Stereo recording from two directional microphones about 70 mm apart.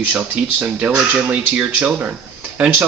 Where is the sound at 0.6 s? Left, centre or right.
Centre.